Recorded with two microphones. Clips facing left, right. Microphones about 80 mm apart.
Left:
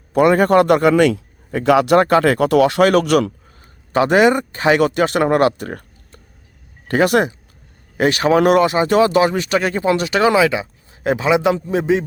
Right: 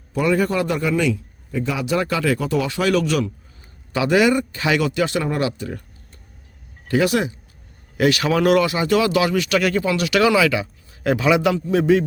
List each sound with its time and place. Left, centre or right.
0.1 s a man's voice: left
3.9 s speech: left
7.9 s speech: left